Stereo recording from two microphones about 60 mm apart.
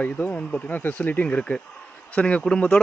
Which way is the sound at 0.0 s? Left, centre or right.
Left.